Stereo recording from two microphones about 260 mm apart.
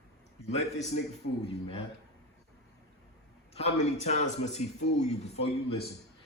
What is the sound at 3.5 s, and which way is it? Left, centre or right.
Speech, left.